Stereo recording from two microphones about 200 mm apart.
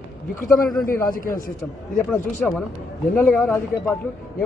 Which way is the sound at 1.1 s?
45° left (ahead or behind).